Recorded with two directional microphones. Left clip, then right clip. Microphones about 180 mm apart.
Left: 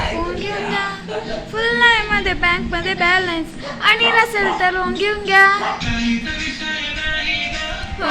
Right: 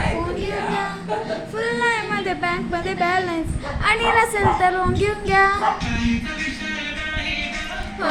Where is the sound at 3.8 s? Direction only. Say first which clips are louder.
Left 4 dB; 10° right (ahead or behind).